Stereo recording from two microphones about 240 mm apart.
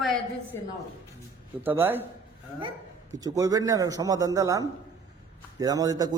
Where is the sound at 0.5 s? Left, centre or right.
Centre.